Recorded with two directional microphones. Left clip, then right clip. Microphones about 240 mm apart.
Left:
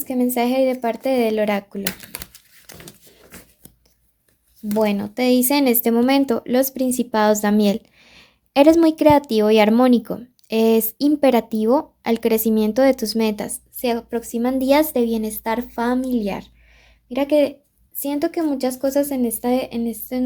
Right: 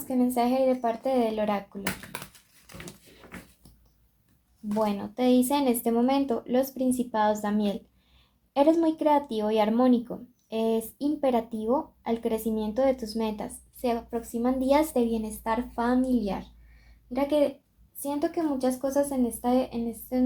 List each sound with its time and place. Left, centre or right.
0.3 s speech: left
4.8 s speech: left